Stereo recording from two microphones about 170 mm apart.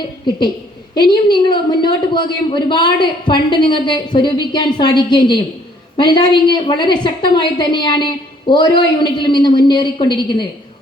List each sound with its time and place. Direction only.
0.9 s a man's voice: 25° left (ahead or behind)